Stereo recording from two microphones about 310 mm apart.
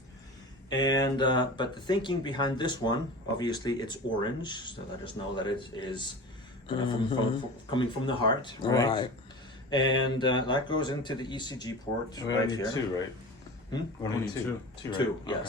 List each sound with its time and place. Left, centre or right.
0.7 s speech: centre
14.8 s speech: centre